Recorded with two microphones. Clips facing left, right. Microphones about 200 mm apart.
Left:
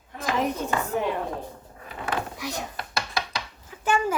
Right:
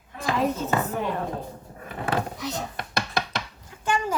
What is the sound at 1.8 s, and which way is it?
Drawer open or close, 40° right (ahead or behind).